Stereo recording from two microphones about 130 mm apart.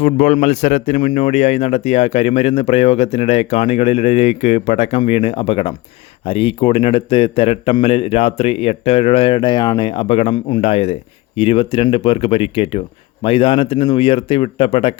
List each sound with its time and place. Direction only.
0.0 s a man's voice: 70° left (ahead or behind); by 14.9 s 45° left (ahead or behind)